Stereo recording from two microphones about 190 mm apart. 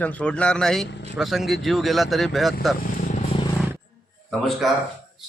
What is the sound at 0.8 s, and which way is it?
Speech, 65° left (ahead or behind).